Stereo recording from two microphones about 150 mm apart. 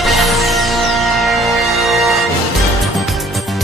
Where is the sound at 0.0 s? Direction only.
Centre (ahead or behind).